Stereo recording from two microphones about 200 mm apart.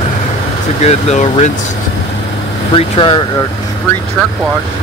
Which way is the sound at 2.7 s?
25° left (ahead or behind).